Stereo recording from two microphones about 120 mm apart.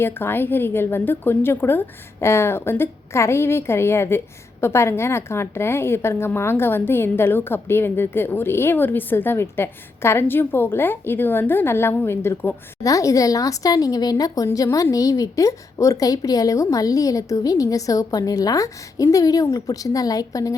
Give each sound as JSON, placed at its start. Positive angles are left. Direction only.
{"t": 0.0, "sound": "a woman's voice", "side_deg": 20}